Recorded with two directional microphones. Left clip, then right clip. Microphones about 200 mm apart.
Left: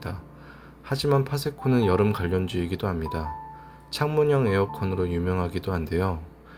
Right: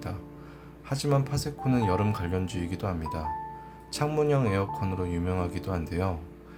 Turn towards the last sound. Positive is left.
turn(degrees=20)  # may be behind; listen again after turning